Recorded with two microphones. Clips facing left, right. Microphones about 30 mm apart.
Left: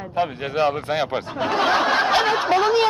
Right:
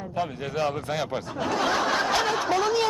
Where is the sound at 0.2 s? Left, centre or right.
Left.